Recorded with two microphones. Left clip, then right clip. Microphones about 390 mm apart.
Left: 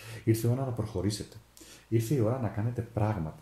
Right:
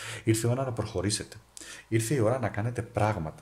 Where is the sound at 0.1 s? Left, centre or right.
Right.